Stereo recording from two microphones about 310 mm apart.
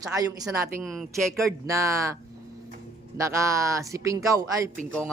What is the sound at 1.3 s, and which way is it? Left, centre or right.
Speech, centre.